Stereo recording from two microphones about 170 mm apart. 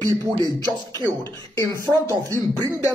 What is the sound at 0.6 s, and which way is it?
Beatboxing, 25° right (ahead or behind).